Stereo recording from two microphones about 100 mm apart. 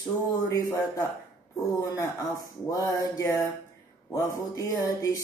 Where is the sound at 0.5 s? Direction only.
35° left (ahead or behind).